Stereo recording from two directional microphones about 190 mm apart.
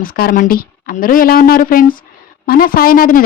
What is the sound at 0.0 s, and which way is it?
Speech, 50° left (ahead or behind).